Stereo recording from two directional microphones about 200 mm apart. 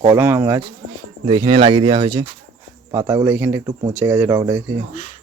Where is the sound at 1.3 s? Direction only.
25° right (ahead or behind).